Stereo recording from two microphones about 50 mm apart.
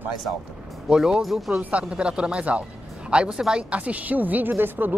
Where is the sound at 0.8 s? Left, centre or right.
Centre.